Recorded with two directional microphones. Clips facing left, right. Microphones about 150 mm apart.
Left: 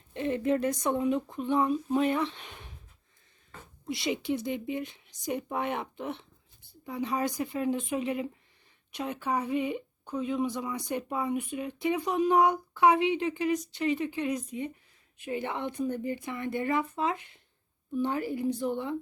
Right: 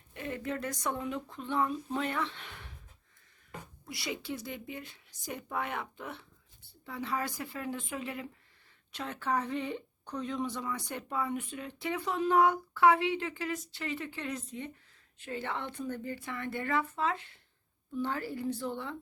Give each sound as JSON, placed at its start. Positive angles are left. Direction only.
{"t": 0.1, "sound": "speech", "side_deg": 25}
{"t": 3.8, "sound": "speech", "side_deg": 20}